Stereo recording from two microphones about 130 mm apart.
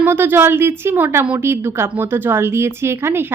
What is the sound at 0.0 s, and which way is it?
A woman's voice, 15° right (ahead or behind).